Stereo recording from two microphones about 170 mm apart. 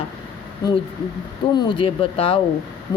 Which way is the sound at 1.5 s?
30° left (ahead or behind).